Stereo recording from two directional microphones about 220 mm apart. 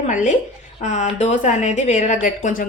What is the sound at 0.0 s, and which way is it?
A woman's voice, 35° left (ahead or behind).